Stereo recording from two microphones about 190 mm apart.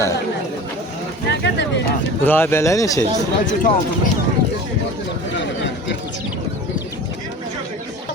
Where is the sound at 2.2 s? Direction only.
10° left (ahead or behind).